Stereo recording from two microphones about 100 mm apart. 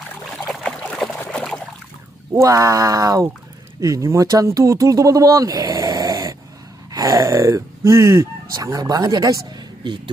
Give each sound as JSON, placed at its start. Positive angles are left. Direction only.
{"t": 0.7, "sound": "trickle", "side_deg": 5}
{"t": 1.3, "sound": "a sound", "side_deg": 5}
{"t": 2.3, "sound": "speech", "side_deg": -35}